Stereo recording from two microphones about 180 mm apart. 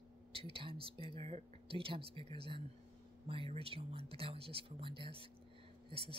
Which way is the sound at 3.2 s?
35° right (ahead or behind).